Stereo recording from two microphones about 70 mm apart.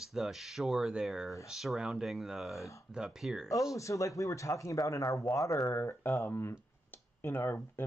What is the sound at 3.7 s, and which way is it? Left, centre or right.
Speech, left.